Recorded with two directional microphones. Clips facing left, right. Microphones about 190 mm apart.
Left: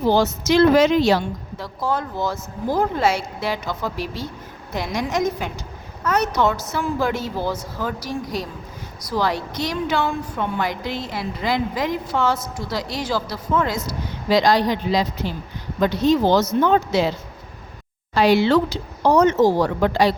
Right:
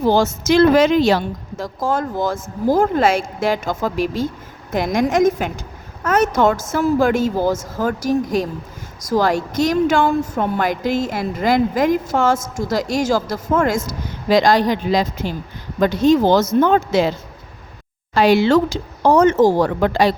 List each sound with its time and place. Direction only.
0.0 s a woman's voice: 45° right (ahead or behind)
18.1 s a woman's voice: 50° right (ahead or behind)